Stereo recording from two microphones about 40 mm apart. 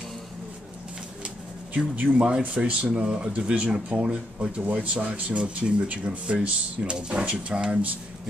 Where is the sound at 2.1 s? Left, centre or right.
Right.